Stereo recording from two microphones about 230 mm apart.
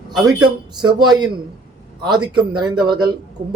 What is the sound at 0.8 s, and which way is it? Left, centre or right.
Speech, centre.